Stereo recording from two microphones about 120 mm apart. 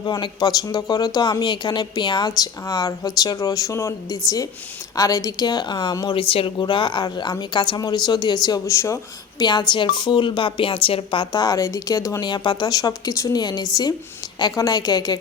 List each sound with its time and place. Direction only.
0.0 s speech: 35° left (ahead or behind)
6.1 s speech: 50° left (ahead or behind); by 9.0 s 25° left (ahead or behind)
9.4 s speech: 40° left (ahead or behind)